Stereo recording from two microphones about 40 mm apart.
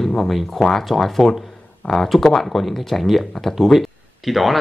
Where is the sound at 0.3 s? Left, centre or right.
Centre.